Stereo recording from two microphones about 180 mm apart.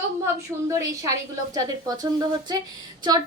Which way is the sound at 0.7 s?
20° right (ahead or behind).